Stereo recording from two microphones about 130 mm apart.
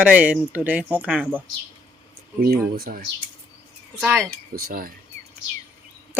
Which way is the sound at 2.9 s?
90° right.